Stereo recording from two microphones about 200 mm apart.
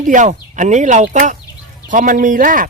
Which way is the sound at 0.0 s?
40° right (ahead or behind).